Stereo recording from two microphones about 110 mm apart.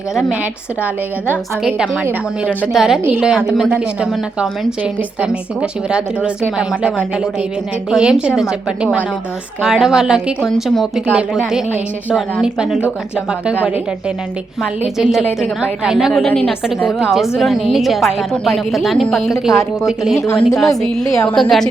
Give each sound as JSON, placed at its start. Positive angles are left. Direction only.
{"t": 2.7, "sound": "a woman's voice", "side_deg": -5}
{"t": 11.0, "sound": "a woman's voice", "side_deg": -10}
{"t": 14.6, "sound": "a woman's voice", "side_deg": -5}
{"t": 20.6, "sound": "a woman's voice", "side_deg": 5}